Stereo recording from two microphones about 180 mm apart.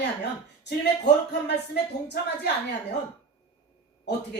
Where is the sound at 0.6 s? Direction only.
70° left (ahead or behind).